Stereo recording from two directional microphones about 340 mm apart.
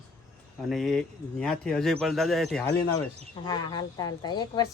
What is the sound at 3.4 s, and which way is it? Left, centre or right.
A woman's voice, centre.